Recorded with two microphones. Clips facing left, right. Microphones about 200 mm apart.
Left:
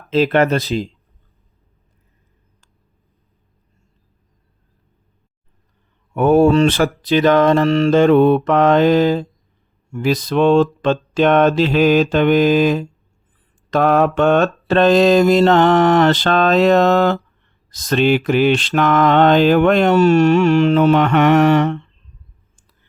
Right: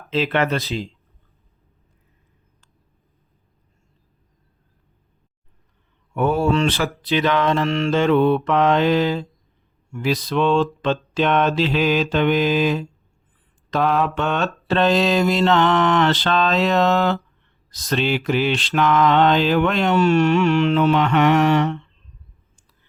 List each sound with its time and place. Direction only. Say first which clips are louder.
0.1 s mantra: left 6 dB; 45° left (ahead or behind)
6.1 s mantra: left 7 dB; 50° left (ahead or behind)